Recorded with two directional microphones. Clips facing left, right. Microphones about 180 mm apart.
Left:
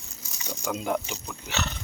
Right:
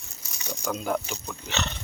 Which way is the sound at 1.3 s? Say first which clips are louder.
Even; 5° left (ahead or behind).